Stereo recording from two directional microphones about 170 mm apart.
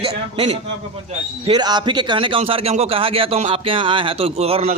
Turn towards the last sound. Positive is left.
turn(degrees=-35)  # may be behind; listen again after turning